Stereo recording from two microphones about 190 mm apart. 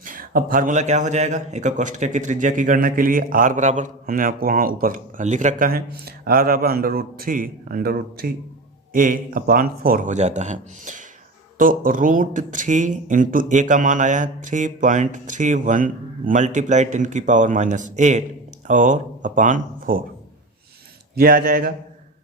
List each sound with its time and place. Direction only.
0.0 s a man's voice: 45° right (ahead or behind)
21.2 s a man's voice: 50° right (ahead or behind)